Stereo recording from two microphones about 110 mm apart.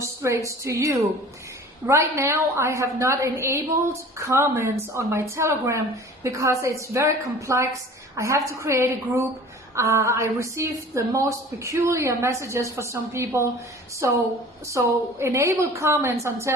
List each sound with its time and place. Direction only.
0.0 s a woman's voice: 25° right (ahead or behind)